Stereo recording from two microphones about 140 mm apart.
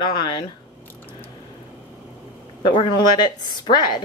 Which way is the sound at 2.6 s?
35° left (ahead or behind).